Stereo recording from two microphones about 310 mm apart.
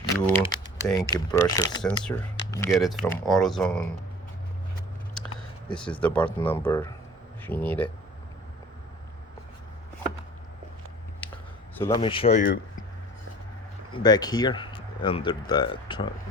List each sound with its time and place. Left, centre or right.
0.1 s speech: centre
5.7 s speech: centre
11.8 s speech: centre
13.9 s speech: centre